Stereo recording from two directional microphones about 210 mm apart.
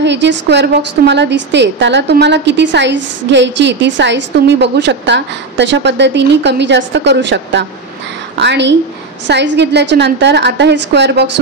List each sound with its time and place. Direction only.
0.0 s a woman's voice: 55° right (ahead or behind)